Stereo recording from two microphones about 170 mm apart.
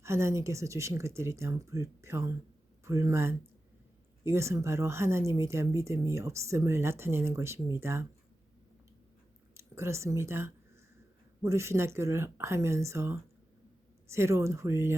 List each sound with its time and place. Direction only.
0.0 s speech: 15° right (ahead or behind)
9.6 s speech: 15° right (ahead or behind)